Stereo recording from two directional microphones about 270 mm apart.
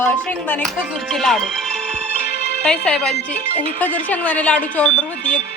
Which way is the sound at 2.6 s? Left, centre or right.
Centre.